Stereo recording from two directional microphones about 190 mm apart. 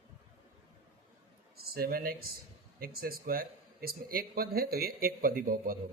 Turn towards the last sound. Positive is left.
turn(degrees=-50)  # may be behind; listen again after turning